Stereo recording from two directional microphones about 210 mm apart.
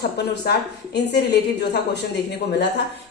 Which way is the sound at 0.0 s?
50° left (ahead or behind).